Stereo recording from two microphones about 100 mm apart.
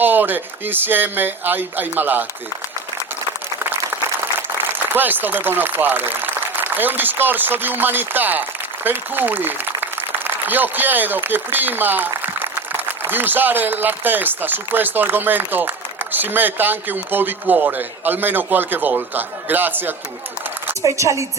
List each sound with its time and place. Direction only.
0.0 s speech: 20° right (ahead or behind)
4.9 s speech: 20° right (ahead or behind)
20.8 s a woman's voice: 30° right (ahead or behind)